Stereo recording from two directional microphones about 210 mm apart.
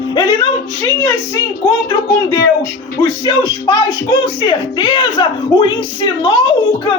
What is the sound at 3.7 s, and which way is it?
Speech, 20° left (ahead or behind).